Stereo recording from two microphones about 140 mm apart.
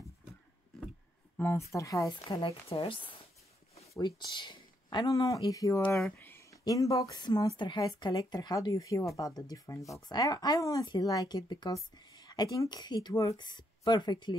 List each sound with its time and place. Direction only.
1.7 s speech: 20° left (ahead or behind)
2.4 s speech: 40° left (ahead or behind)
3.9 s speech: 30° left (ahead or behind)
6.0 s a sound: 15° left (ahead or behind)
6.6 s speech: 25° left (ahead or behind)
9.8 s speech: centre (ahead or behind)
10.0 s speech: 30° left (ahead or behind)